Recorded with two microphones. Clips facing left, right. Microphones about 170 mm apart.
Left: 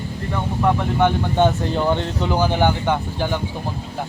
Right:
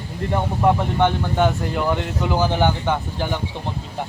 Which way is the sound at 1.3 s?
25° left (ahead or behind).